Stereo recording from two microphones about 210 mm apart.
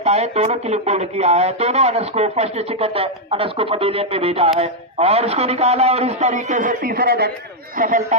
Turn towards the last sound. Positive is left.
turn(degrees=-40)  # may be behind; listen again after turning